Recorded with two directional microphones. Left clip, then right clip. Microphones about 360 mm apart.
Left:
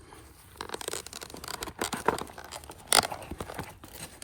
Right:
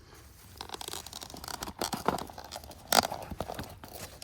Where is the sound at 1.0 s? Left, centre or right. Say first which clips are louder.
Left 1 dB; centre.